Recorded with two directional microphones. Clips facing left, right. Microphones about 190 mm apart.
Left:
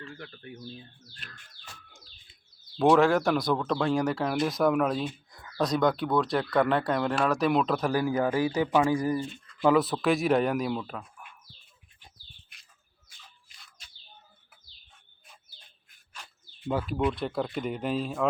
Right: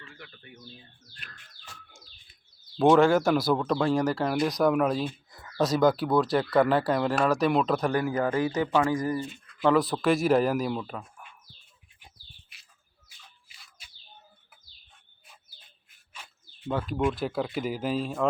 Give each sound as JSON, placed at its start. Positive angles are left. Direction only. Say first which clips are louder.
{"t": 0.0, "sound": "a sound", "louder": "left 6 dB", "side_deg": 35}
{"t": 2.7, "sound": "speech", "louder": "right 2 dB", "side_deg": 0}
{"t": 9.6, "sound": "speech", "louder": "even", "side_deg": 0}
{"t": 13.2, "sound": "a sound", "louder": "even", "side_deg": -5}
{"t": 15.5, "sound": "bird", "louder": "left 1 dB", "side_deg": -5}
{"t": 16.6, "sound": "speech", "louder": "even", "side_deg": 5}